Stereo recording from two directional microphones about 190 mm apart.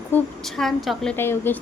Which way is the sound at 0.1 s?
Centre (ahead or behind).